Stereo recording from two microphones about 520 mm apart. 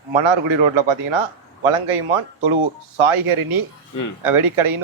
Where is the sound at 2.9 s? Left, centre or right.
Right.